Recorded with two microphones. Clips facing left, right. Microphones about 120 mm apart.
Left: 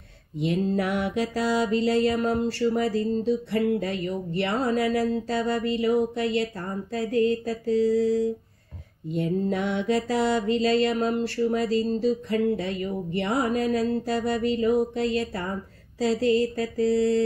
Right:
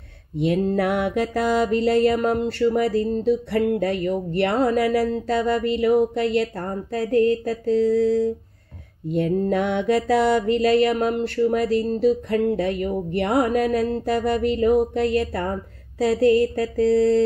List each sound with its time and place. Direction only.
0.7 s music: 60° right (ahead or behind)